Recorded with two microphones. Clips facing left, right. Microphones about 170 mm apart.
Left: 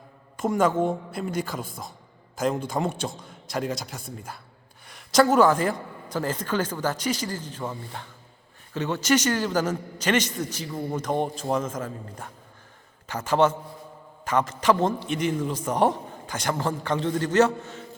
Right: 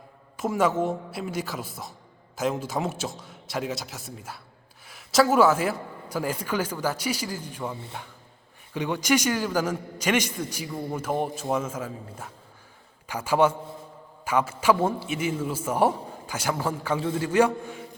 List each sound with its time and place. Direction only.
0.3 s a man's voice: 5° right (ahead or behind)
8.7 s a man's voice: 10° right (ahead or behind)